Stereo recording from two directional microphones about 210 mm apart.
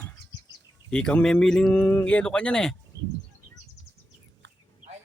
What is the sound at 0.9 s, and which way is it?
Speech, 5° left (ahead or behind).